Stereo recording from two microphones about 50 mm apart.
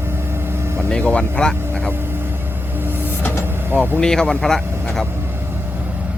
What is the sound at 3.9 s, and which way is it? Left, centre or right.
Speech, centre.